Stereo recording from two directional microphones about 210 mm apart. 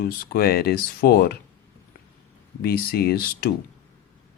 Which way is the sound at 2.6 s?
45° left (ahead or behind).